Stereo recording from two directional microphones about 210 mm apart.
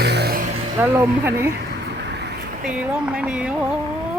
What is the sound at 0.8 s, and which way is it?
Speech, 10° right (ahead or behind).